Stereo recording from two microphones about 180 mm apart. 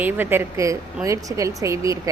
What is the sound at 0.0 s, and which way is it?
A woman's voice, 10° right (ahead or behind).